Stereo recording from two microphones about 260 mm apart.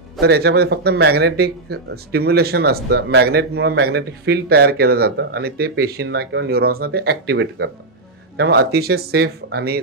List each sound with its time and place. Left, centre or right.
0.2 s speech: right